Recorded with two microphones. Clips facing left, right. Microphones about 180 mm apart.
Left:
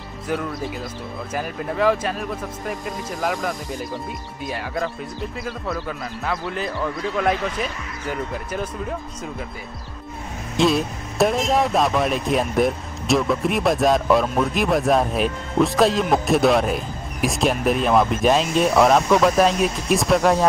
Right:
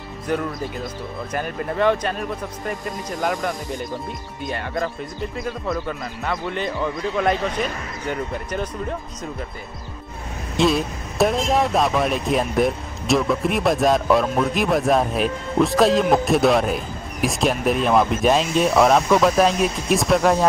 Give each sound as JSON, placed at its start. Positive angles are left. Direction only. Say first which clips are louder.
{"t": 0.3, "sound": "speech", "louder": "right 1 dB", "side_deg": 0}
{"t": 10.5, "sound": "speech", "louder": "even", "side_deg": 0}